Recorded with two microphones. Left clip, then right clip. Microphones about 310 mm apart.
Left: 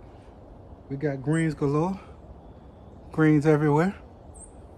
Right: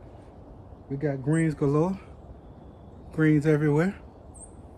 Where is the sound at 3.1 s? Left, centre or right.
Centre.